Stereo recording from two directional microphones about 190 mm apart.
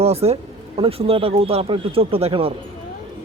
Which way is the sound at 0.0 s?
35° right (ahead or behind).